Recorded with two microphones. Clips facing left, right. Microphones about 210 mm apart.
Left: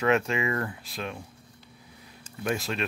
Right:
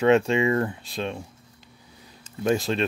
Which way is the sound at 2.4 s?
30° right (ahead or behind).